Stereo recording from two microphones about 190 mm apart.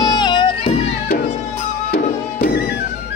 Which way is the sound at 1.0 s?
50° left (ahead or behind).